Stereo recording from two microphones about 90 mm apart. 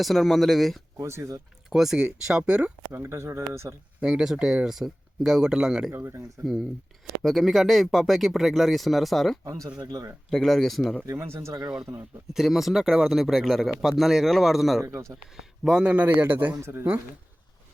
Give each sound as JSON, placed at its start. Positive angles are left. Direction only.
{"t": 0.0, "sound": "speech", "side_deg": 0}
{"t": 0.9, "sound": "speech", "side_deg": -30}
{"t": 1.7, "sound": "speech", "side_deg": -5}
{"t": 2.9, "sound": "speech", "side_deg": -30}
{"t": 4.0, "sound": "speech", "side_deg": -5}
{"t": 5.9, "sound": "speech", "side_deg": -30}
{"t": 6.4, "sound": "speech", "side_deg": 0}
{"t": 9.4, "sound": "speech", "side_deg": -40}
{"t": 10.2, "sound": "speech", "side_deg": 5}
{"t": 11.0, "sound": "speech", "side_deg": -30}
{"t": 12.3, "sound": "a man's voice", "side_deg": -5}
{"t": 16.6, "sound": "speech", "side_deg": -30}